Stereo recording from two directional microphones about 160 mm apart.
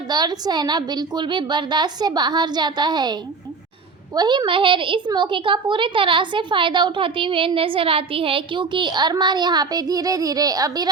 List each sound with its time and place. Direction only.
0.1 s a woman's voice: 25° right (ahead or behind)